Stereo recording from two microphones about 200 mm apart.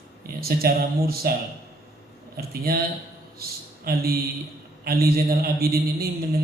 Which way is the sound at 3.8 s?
50° right (ahead or behind).